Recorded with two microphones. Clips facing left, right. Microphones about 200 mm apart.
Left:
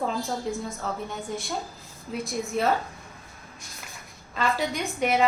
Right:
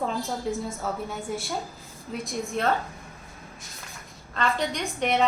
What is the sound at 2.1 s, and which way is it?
Speech, centre (ahead or behind).